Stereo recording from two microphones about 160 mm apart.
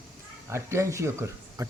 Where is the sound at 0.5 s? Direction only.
20° right (ahead or behind).